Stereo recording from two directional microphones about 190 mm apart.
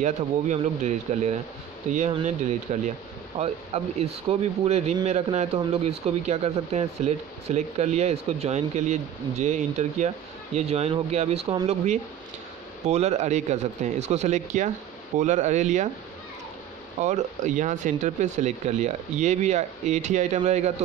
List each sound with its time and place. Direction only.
0.0 s speech: 40° right (ahead or behind)
17.0 s speech: 40° right (ahead or behind)